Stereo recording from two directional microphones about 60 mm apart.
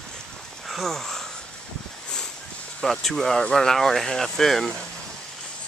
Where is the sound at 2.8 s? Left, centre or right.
Centre.